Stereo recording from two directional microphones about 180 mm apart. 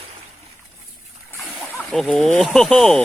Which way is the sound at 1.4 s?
Centre (ahead or behind).